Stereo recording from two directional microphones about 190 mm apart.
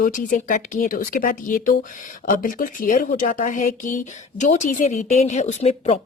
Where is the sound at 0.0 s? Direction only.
45° left (ahead or behind).